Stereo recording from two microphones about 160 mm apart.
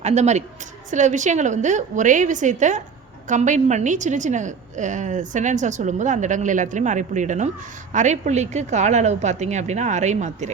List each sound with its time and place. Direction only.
0.0 s a woman's voice: 45° right (ahead or behind)